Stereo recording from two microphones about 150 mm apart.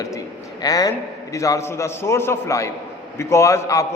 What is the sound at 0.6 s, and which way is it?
A man's voice, 25° left (ahead or behind).